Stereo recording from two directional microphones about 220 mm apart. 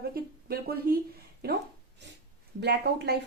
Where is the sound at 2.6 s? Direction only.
50° right (ahead or behind).